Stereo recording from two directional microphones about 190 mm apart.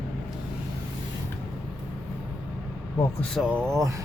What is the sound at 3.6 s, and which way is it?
Speech, 15° right (ahead or behind).